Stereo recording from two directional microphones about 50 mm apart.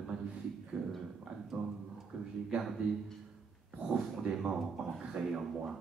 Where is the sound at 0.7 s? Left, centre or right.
Right.